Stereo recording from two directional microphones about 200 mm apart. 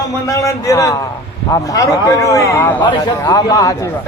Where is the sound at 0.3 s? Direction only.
15° left (ahead or behind).